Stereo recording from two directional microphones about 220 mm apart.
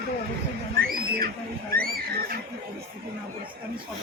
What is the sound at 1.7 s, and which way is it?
Speech, 40° right (ahead or behind).